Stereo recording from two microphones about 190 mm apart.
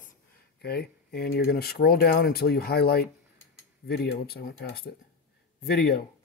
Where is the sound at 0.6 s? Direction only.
55° left (ahead or behind).